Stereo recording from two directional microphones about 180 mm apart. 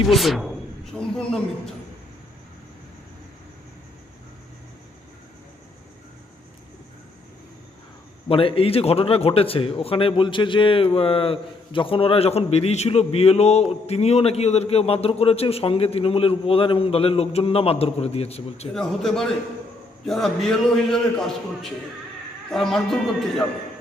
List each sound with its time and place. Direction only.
0.1 s a man's voice: centre (ahead or behind)
8.3 s a man's voice: 30° left (ahead or behind)
18.7 s a man's voice: centre (ahead or behind)